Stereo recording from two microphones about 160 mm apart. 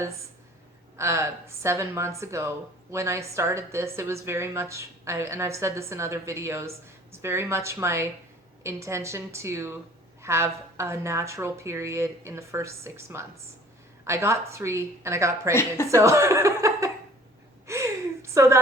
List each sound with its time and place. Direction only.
0.9 s speech: 15° right (ahead or behind)
15.9 s chuckle: 20° right (ahead or behind)
17.7 s a sound: 20° right (ahead or behind)